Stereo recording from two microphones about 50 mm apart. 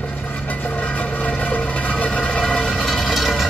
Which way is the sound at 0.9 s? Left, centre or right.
Left.